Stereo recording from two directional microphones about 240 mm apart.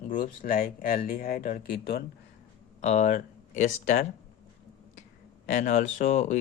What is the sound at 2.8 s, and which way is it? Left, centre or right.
Speech, left.